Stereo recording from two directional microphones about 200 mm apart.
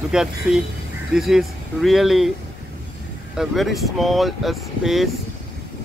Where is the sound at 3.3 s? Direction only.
Centre (ahead or behind).